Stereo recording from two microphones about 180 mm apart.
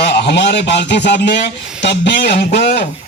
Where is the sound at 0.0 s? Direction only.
70° left (ahead or behind).